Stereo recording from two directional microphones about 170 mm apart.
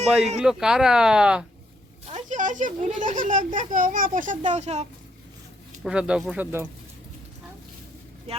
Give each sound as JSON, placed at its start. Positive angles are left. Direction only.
{"t": 0.3, "sound": "speech", "side_deg": -5}
{"t": 2.1, "sound": "a child's voice", "side_deg": -45}
{"t": 5.8, "sound": "speech", "side_deg": -5}